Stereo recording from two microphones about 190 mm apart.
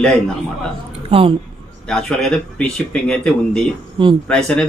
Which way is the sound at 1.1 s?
30° right (ahead or behind).